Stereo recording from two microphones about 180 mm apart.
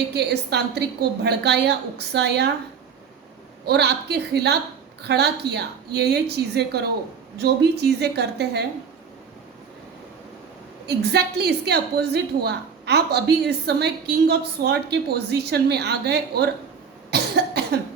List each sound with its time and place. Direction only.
0.1 s a woman's voice: 65° right (ahead or behind)
3.7 s a woman's voice: 65° right (ahead or behind)
10.8 s a woman's voice: 65° right (ahead or behind)
17.1 s cough: 65° right (ahead or behind)